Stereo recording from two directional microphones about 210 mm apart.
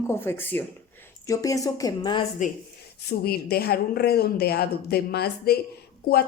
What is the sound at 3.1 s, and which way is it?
Speech, 50° left (ahead or behind).